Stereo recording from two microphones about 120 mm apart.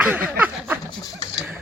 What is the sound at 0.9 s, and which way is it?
Dog, 35° left (ahead or behind).